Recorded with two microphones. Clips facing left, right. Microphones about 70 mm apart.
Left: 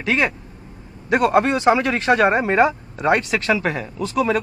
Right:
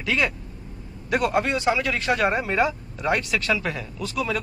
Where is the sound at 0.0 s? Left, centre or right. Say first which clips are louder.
Left 4 dB; left.